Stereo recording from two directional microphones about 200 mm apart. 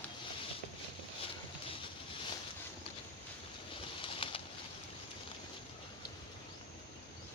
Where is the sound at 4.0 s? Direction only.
25° left (ahead or behind).